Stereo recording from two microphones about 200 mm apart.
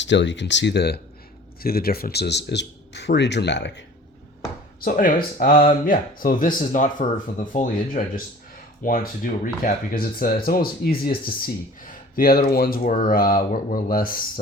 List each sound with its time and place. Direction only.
0.0 s speech: 65° left (ahead or behind)
4.8 s speech: 45° left (ahead or behind)